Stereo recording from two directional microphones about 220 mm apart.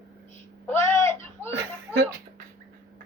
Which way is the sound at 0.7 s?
10° left (ahead or behind).